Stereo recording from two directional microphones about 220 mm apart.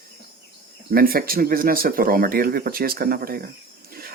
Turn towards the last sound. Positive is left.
turn(degrees=-40)  # may be behind; listen again after turning